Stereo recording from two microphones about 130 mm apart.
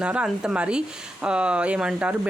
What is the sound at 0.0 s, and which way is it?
Speech, 10° right (ahead or behind).